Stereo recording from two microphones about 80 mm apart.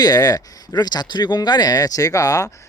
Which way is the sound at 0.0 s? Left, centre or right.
Left.